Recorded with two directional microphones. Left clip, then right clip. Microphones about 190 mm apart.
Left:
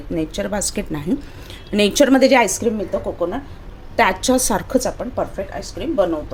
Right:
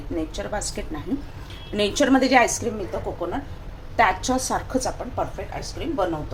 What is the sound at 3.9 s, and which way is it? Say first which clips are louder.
A woman's voice: left 4 dB; 55° left (ahead or behind).